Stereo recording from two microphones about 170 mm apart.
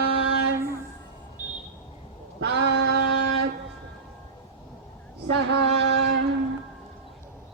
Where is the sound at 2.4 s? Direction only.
85° right.